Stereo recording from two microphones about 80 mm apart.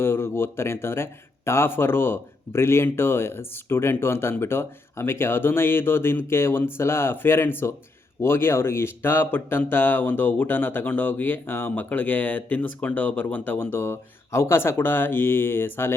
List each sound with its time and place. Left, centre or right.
0.0 s a man's voice: left
13.7 s a man's voice: left